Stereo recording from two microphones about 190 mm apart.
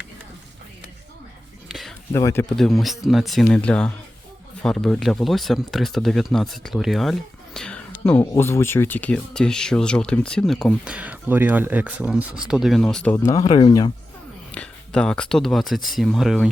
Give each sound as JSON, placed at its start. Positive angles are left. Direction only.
{"t": 1.6, "sound": "a sound", "side_deg": 0}
{"t": 2.1, "sound": "speech", "side_deg": 15}
{"t": 2.6, "sound": "speech", "side_deg": 0}
{"t": 13.1, "sound": "speech", "side_deg": 15}
{"t": 14.5, "sound": "speech", "side_deg": 5}